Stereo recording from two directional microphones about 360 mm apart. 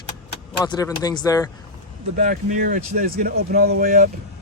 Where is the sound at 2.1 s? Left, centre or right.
Right.